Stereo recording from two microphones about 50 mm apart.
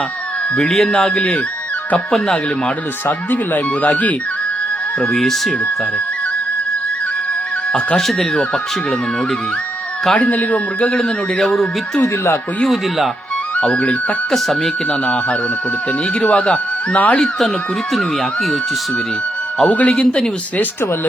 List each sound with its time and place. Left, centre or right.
0.5 s a man's voice: centre
2.0 s speech: centre
2.6 s speech: left
5.1 s speech: centre
7.9 s speech: centre
10.2 s a man's voice: left; by 11.5 s centre
12.0 s speech: left
12.6 s speech: centre
13.6 s a man's voice: left
14.3 s speech: centre
14.8 s a man's voice: left
17.9 s speech: centre
19.6 s a man's voice: left
19.9 s speech: centre